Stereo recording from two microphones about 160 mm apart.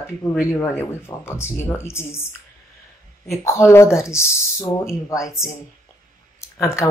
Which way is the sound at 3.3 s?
15° left (ahead or behind).